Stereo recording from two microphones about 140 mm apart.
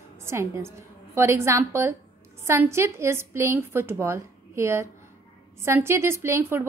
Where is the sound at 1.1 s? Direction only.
20° right (ahead or behind).